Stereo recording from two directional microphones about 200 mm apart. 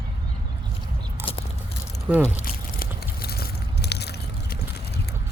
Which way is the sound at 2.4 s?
50° left (ahead or behind).